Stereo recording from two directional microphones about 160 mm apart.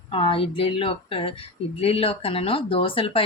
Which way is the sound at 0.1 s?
35° left (ahead or behind).